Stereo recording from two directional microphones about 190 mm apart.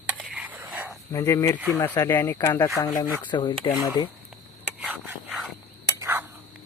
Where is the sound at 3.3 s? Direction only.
25° left (ahead or behind).